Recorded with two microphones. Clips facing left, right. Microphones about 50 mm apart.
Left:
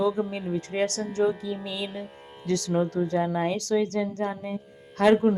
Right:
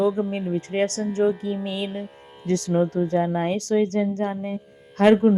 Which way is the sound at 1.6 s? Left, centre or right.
Right.